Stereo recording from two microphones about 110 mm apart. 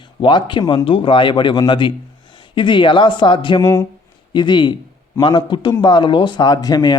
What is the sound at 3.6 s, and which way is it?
Speech, 25° left (ahead or behind).